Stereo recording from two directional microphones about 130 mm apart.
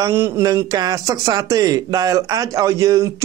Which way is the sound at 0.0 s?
20° right (ahead or behind).